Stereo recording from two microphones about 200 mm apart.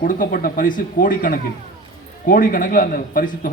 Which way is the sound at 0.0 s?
45° left (ahead or behind).